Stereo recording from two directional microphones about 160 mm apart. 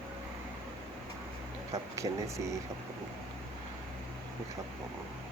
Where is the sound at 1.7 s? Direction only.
20° right (ahead or behind).